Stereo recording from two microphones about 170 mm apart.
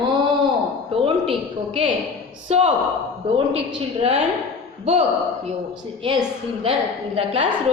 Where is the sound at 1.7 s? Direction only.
30° right (ahead or behind).